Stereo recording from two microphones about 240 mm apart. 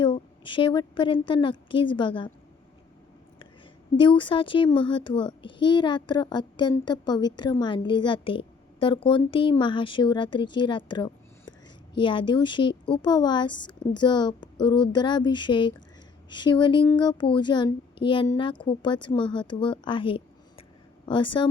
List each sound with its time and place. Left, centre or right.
0.0 s a woman's voice: left
3.9 s a child's voice: centre